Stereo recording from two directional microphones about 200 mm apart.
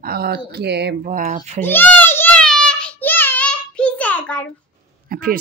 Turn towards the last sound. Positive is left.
turn(degrees=-45)  # may be behind; listen again after turning